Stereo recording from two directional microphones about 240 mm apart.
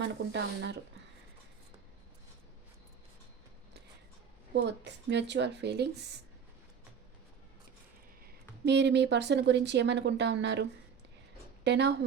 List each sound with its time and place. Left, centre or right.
0.0 s speech: right
4.5 s speech: right
8.6 s speech: right